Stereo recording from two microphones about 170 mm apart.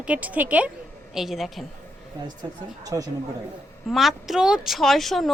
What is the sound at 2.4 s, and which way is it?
Speech, 20° right (ahead or behind).